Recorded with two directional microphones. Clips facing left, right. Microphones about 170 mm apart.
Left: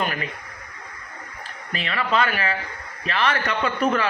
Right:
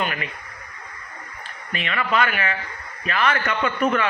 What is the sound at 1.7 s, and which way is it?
A man's voice, 35° left (ahead or behind).